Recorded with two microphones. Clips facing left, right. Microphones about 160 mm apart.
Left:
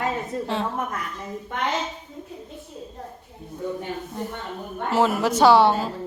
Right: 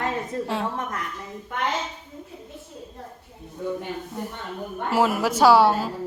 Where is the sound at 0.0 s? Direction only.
5° right (ahead or behind).